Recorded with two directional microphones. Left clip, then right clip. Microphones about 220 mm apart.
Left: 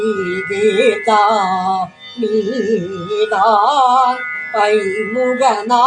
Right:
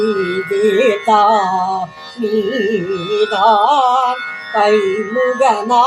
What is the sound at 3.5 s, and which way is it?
Music, 15° right (ahead or behind).